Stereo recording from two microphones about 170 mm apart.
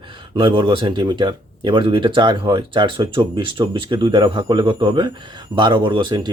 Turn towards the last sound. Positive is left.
turn(degrees=-30)  # may be behind; listen again after turning